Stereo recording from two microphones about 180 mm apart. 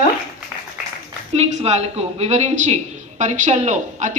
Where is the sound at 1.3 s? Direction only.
35° right (ahead or behind).